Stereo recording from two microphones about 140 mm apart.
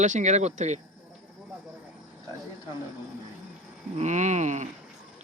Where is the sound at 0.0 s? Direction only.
55° right (ahead or behind).